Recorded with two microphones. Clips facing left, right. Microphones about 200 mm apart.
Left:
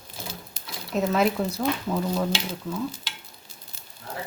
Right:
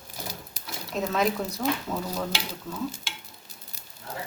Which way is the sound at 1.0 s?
5° left (ahead or behind).